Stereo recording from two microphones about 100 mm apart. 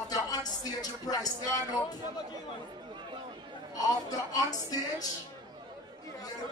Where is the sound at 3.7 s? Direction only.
40° left (ahead or behind).